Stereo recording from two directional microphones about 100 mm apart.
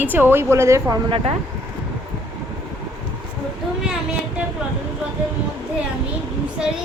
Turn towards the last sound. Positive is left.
turn(degrees=-5)  # may be behind; listen again after turning